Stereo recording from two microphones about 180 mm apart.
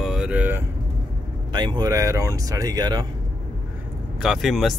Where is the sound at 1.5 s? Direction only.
25° right (ahead or behind).